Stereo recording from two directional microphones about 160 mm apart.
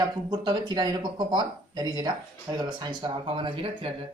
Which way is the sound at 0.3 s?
30° right (ahead or behind).